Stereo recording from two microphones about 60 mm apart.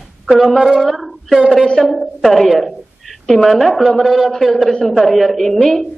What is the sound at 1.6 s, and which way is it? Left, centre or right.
A woman's voice, centre.